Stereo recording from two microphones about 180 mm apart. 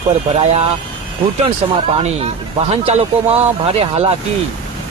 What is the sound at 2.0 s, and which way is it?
Speech, 35° right (ahead or behind).